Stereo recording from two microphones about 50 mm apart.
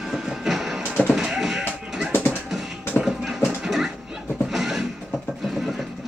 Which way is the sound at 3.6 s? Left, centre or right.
Centre.